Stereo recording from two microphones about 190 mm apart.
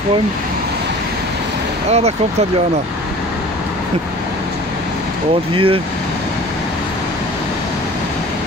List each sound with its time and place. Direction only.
1.9 s speech: 35° right (ahead or behind)
5.5 s speech: 30° right (ahead or behind)